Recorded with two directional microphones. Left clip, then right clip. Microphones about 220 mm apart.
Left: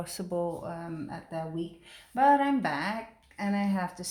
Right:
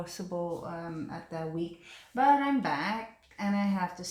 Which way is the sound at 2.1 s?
40° left (ahead or behind).